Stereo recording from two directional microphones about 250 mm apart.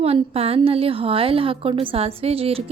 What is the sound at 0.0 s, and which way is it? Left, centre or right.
A woman's voice, right.